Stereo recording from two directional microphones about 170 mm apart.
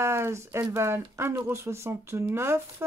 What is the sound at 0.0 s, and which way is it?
Speech, 15° right (ahead or behind).